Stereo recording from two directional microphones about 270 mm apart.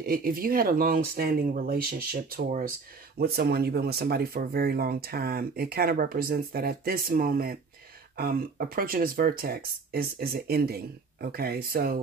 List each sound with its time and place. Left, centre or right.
0.0 s speech: right